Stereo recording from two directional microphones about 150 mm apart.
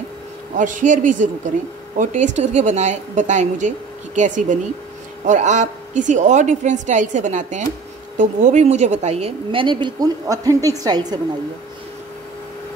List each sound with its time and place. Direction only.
0.6 s a man's voice: 60° right (ahead or behind); by 11.1 s 25° right (ahead or behind)